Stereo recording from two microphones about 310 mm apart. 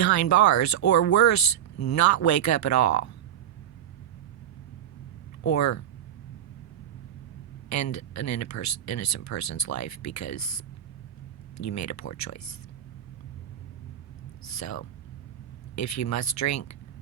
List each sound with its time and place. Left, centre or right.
0.0 s speech: left
5.5 s speech: left
7.7 s speech: left
14.4 s whispering: left
15.7 s speech: left